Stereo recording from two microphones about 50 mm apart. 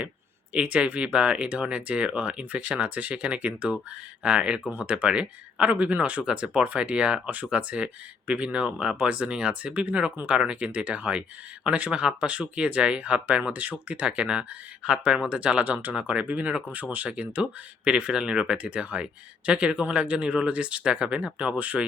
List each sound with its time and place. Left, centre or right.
0.5 s speech: right
17.4 s speech: centre